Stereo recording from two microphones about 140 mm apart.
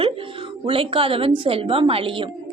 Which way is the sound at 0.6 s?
40° right (ahead or behind).